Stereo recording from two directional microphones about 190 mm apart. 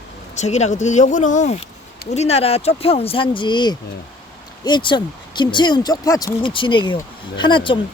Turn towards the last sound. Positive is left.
turn(degrees=25)  # may be behind; listen again after turning